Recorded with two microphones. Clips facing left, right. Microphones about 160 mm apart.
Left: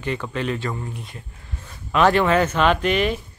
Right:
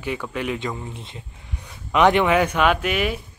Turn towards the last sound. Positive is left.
turn(degrees=-10)  # may be behind; listen again after turning